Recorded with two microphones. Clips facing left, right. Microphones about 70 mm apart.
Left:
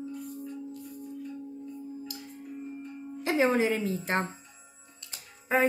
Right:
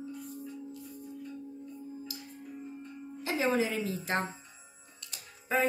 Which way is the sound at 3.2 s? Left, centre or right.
Left.